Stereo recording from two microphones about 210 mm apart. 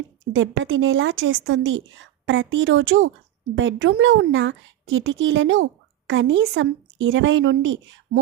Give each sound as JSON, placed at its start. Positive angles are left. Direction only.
{"t": 0.3, "sound": "a woman's voice", "side_deg": -65}